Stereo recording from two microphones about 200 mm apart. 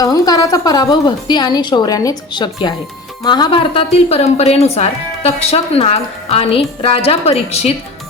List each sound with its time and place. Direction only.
0.0 s a woman's voice: 20° left (ahead or behind)